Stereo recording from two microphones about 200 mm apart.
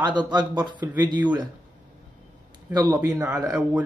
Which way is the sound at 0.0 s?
20° right (ahead or behind).